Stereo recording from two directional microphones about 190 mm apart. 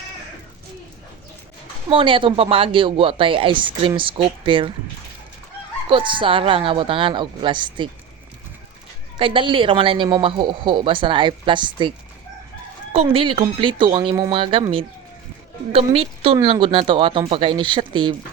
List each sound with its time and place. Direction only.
1.9 s speech: 25° right (ahead or behind)
5.9 s speech: 25° right (ahead or behind)
9.1 s speech: 25° right (ahead or behind)
12.9 s speech: 30° right (ahead or behind)